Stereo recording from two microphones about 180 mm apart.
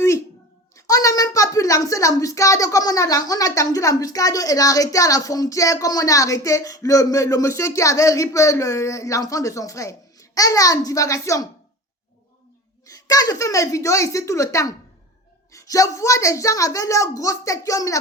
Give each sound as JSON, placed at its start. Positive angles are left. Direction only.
{"t": 0.9, "sound": "a woman's voice", "side_deg": 20}
{"t": 12.9, "sound": "a woman's voice", "side_deg": 20}